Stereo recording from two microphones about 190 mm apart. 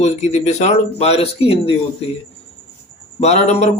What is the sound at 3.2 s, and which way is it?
Speech, 35° left (ahead or behind).